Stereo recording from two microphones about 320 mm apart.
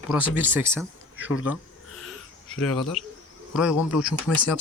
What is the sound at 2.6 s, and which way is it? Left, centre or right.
Speech, centre.